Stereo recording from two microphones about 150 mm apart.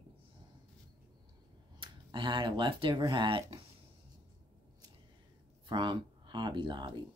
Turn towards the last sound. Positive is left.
turn(degrees=-30)  # may be behind; listen again after turning